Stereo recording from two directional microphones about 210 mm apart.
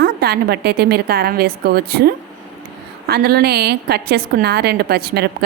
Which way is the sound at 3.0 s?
50° right (ahead or behind).